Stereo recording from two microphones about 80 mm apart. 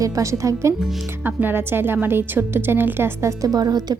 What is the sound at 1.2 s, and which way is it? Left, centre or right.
A woman's voice, right.